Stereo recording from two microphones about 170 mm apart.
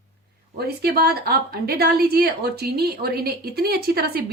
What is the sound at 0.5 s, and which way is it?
A woman's voice, 65° right (ahead or behind).